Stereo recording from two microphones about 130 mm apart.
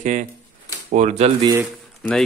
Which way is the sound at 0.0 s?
75° right (ahead or behind).